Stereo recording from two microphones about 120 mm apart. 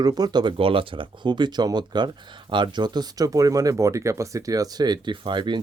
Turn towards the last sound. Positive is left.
turn(degrees=-40)  # may be behind; listen again after turning